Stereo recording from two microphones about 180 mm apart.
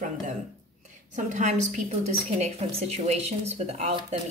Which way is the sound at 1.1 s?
40° right (ahead or behind).